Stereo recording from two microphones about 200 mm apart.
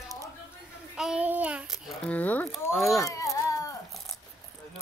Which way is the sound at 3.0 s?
15° left (ahead or behind).